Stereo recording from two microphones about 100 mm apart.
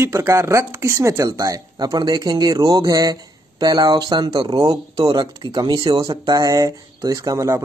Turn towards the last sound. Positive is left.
turn(degrees=-35)  # may be behind; listen again after turning